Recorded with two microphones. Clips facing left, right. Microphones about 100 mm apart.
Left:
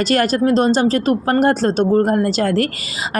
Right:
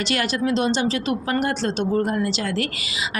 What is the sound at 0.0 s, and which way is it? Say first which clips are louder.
A woman's voice: left 7 dB; 40° left (ahead or behind).